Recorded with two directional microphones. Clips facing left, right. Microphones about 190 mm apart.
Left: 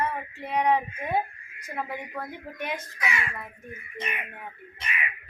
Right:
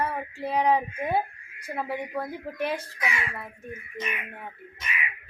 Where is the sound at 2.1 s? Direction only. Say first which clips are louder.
Right 5 dB; 30° right (ahead or behind).